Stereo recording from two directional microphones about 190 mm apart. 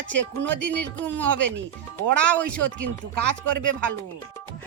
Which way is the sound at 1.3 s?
75° right (ahead or behind).